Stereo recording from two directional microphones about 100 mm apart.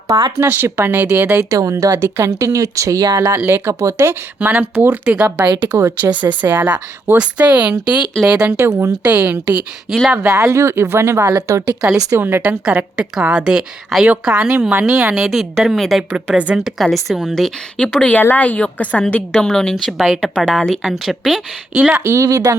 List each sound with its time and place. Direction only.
0.3 s a woman's voice: 20° right (ahead or behind)
1.5 s speech: 35° right (ahead or behind)
4.4 s a woman's voice: 15° right (ahead or behind)
5.5 s a woman's voice: 20° right (ahead or behind)
8.4 s a woman's voice: 25° right (ahead or behind)
9.0 s a woman's voice: 15° right (ahead or behind)
9.9 s a woman's voice: centre (ahead or behind)
10.2 s a woman's voice: 30° right (ahead or behind); by 16.0 s centre (ahead or behind)
16.3 s a woman's voice: 10° right (ahead or behind)
16.6 s a woman's voice: centre (ahead or behind)
21.8 s a woman's voice: 15° right (ahead or behind)
22.0 s speech: 30° right (ahead or behind)